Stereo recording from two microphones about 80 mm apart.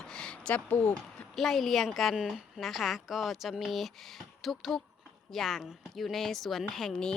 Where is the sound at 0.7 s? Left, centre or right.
Left.